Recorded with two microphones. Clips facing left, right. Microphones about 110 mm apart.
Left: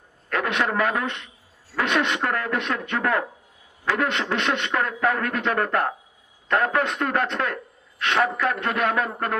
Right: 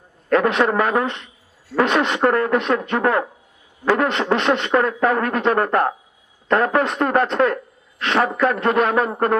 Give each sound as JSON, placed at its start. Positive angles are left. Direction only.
{"t": 0.3, "sound": "speech", "side_deg": -35}